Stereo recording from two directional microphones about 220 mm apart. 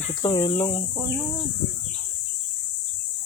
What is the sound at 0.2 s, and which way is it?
Speech, 20° left (ahead or behind).